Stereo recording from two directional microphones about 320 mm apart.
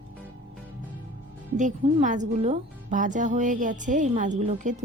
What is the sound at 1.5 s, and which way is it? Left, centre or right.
A woman's voice, right.